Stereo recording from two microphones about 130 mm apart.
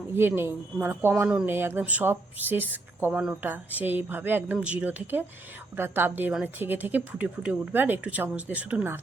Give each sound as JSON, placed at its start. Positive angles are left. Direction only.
{"t": 0.2, "sound": "a woman's voice", "side_deg": -15}